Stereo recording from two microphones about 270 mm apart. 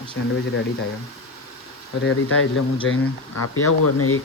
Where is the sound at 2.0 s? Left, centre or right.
Left.